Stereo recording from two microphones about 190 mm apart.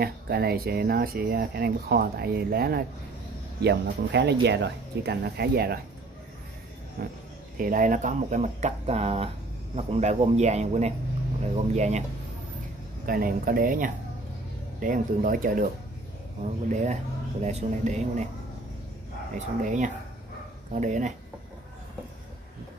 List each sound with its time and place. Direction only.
0.0 s speech: 55° right (ahead or behind)
7.0 s speech: 55° right (ahead or behind); by 12.0 s 35° right (ahead or behind)
13.0 s speech: 50° right (ahead or behind)
16.6 s speech: 40° right (ahead or behind)
19.3 s speech: 40° right (ahead or behind)